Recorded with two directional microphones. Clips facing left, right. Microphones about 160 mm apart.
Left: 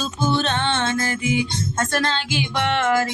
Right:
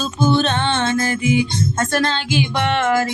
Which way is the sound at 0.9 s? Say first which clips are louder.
Right 4 dB; 15° right (ahead or behind).